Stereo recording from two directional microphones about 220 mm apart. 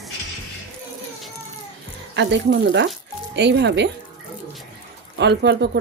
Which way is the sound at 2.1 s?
50° right (ahead or behind).